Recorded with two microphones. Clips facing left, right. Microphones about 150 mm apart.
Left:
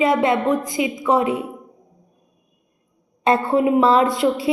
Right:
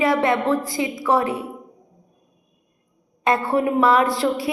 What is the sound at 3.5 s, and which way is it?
Music, 25° left (ahead or behind).